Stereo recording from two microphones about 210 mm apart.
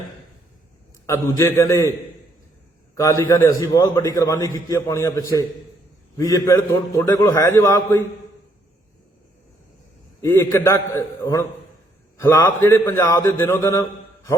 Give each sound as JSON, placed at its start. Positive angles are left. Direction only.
{"t": 1.0, "sound": "a man's voice", "side_deg": 15}
{"t": 2.9, "sound": "a man's voice", "side_deg": 15}
{"t": 10.2, "sound": "a man's voice", "side_deg": 15}